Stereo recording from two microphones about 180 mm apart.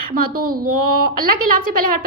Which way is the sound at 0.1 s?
55° right (ahead or behind).